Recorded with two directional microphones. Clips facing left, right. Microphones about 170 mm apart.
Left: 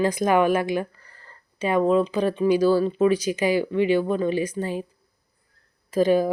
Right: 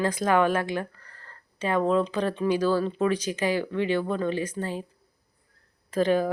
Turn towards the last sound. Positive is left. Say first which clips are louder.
# left 4 dB
turn(degrees=10)  # may be behind; listen again after turning